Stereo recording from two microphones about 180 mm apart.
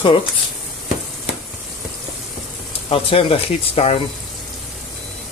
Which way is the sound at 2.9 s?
30° left (ahead or behind).